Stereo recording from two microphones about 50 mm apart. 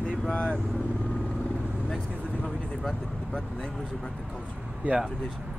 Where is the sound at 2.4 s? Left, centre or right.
Centre.